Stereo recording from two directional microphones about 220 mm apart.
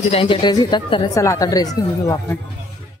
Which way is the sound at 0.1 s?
25° left (ahead or behind).